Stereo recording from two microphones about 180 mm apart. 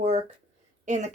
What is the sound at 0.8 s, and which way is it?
Speech, 40° right (ahead or behind).